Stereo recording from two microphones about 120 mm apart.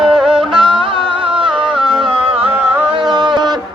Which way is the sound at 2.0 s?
45° right (ahead or behind).